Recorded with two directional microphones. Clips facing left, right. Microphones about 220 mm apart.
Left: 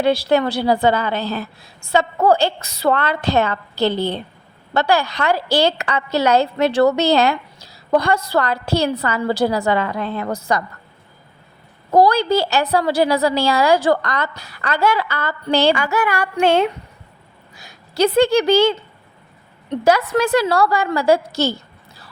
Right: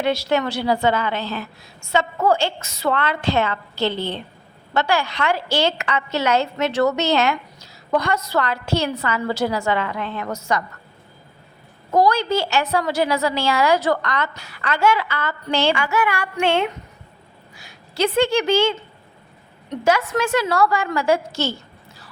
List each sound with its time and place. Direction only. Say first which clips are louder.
0.0 s a woman's voice: left 4 dB; 35° left (ahead or behind)
11.9 s a woman's voice: left 4 dB; 35° left (ahead or behind)